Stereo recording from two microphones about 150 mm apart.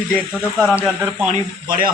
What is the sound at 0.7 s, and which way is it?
Speech, 10° right (ahead or behind).